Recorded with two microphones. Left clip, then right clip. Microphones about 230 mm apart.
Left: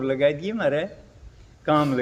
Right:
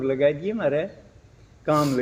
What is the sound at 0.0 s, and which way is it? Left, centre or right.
A man's voice, left.